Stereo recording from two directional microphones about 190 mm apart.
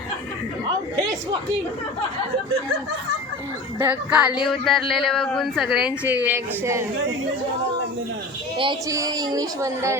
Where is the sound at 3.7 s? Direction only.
10° right (ahead or behind).